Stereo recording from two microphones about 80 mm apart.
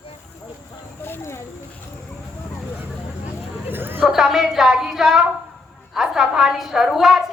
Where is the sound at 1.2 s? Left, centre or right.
Left.